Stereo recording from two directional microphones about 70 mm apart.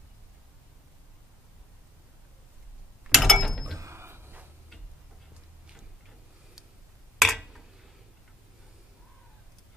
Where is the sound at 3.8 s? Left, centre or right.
Right.